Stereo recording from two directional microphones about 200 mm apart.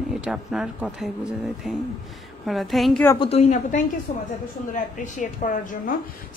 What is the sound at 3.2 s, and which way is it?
A woman's voice, 30° left (ahead or behind).